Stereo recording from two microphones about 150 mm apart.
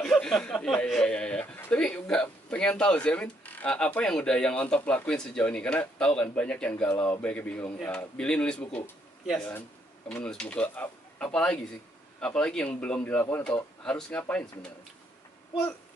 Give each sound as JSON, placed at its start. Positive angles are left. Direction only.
{"t": 0.0, "sound": "speech", "side_deg": 5}
{"t": 9.5, "sound": "speech", "side_deg": 10}